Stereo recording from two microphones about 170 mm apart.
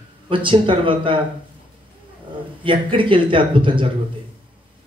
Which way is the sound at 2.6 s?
30° right (ahead or behind).